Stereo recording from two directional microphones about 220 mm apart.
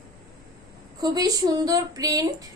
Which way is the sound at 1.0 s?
15° right (ahead or behind).